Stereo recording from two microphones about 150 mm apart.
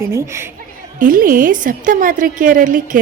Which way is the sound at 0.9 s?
65° right (ahead or behind).